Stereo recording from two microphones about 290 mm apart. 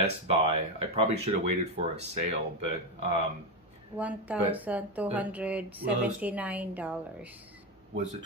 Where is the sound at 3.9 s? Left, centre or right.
Centre.